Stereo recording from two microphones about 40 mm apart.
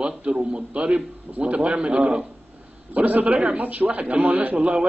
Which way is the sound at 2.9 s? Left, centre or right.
Right.